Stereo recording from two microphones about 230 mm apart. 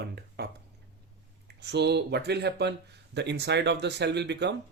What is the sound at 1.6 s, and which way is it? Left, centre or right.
A man's voice, right.